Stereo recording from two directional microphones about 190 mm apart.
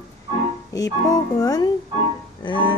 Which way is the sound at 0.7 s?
20° left (ahead or behind).